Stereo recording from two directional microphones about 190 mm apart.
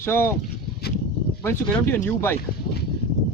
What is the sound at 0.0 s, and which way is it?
Speech, 10° left (ahead or behind).